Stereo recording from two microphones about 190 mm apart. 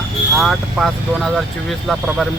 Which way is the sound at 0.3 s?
Centre (ahead or behind).